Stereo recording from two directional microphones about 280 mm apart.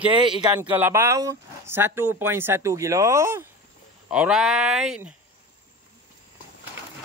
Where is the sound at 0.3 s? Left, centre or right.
Centre.